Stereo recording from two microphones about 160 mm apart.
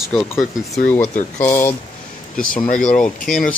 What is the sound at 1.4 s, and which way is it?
Speech, 15° left (ahead or behind).